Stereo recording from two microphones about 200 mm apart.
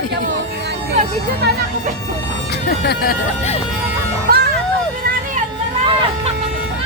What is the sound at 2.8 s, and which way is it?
Speech, 55° left (ahead or behind).